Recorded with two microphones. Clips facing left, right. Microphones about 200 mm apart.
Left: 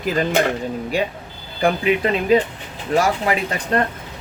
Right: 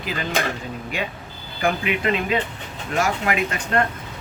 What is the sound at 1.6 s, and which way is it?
Speech, 35° left (ahead or behind).